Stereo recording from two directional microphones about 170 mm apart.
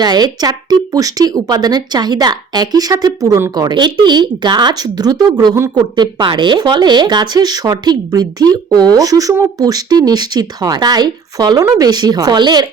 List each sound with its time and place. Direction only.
0.0 s speech: 25° right (ahead or behind)